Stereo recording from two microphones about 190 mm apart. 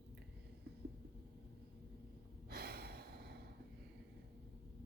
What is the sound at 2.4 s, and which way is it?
Gasp, 55° right (ahead or behind).